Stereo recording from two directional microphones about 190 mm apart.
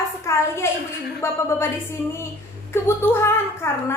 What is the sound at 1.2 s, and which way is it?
Speech, 15° left (ahead or behind).